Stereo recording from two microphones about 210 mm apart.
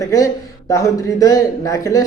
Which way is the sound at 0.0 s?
15° left (ahead or behind).